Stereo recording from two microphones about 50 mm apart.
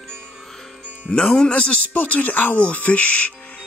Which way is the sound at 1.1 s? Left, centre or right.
Left.